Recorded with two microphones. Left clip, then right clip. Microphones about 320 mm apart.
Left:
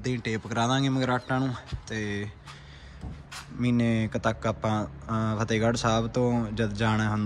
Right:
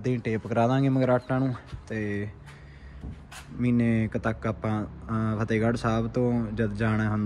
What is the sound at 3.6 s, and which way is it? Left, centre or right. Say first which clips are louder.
Speech: right 1 dB; centre.